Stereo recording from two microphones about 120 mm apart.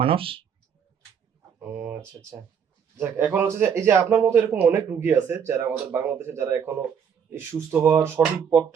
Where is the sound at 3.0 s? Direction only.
15° right (ahead or behind).